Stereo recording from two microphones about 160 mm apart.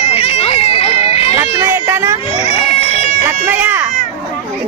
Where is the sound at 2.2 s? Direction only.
35° left (ahead or behind).